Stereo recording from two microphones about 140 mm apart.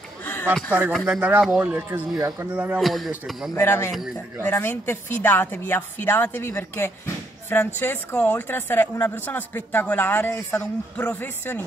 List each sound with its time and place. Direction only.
1.0 s speech: 10° right (ahead or behind)
2.6 s speech: 5° right (ahead or behind)
3.5 s a woman's voice: 15° left (ahead or behind)